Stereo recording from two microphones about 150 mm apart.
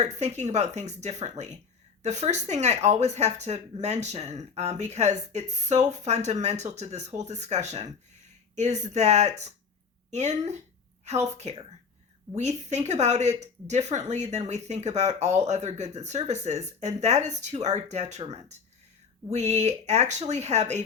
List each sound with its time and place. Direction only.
0.0 s speech: 50° right (ahead or behind)
19.3 s speech: 50° right (ahead or behind)